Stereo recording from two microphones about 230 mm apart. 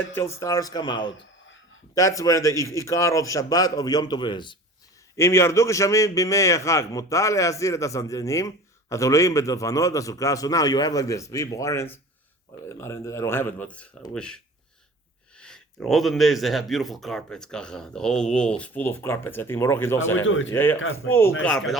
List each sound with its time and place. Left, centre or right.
0.1 s a man's voice: centre
20.1 s speech: left
20.5 s a man's voice: centre